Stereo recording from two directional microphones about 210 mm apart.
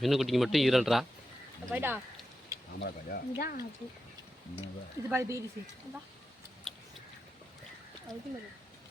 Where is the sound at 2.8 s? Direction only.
50° left (ahead or behind).